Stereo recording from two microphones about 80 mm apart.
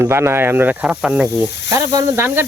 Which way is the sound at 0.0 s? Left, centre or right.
Right.